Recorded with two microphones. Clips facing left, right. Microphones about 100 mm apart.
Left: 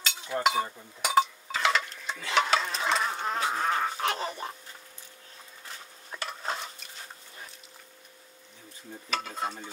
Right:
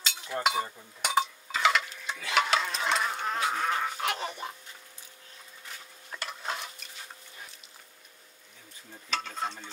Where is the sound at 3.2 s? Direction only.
30° left (ahead or behind).